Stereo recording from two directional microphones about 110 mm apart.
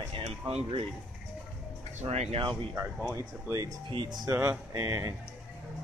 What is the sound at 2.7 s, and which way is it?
Speech, 20° right (ahead or behind).